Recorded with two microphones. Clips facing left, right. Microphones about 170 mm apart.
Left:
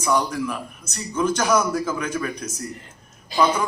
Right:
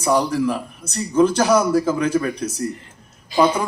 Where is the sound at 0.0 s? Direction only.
35° right (ahead or behind).